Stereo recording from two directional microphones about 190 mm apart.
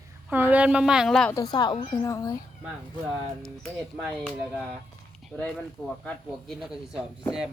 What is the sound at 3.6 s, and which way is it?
Speech, centre (ahead or behind).